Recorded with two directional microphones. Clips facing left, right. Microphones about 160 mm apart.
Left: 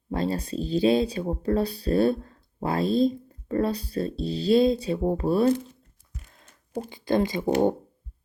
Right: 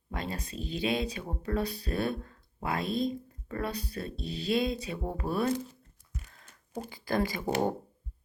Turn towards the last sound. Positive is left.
turn(degrees=20)  # may be behind; listen again after turning